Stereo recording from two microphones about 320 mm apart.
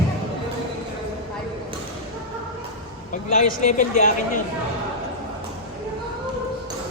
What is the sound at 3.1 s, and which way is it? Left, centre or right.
Speech, left.